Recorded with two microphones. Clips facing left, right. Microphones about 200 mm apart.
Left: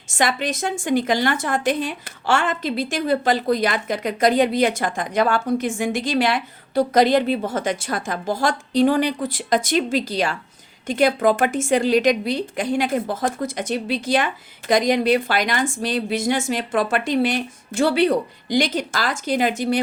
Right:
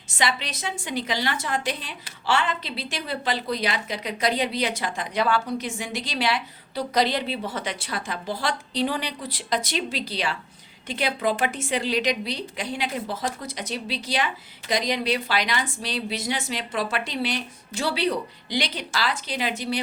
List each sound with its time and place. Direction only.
0.1 s a woman's voice: 50° left (ahead or behind)